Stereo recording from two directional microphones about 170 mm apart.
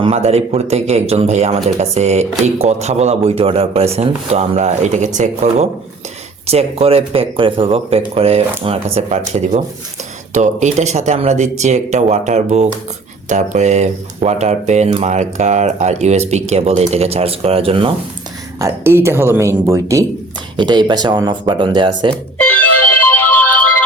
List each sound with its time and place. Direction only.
0.0 s speech: 35° right (ahead or behind)
18.6 s speech: 15° right (ahead or behind)
22.4 s music: 10° left (ahead or behind)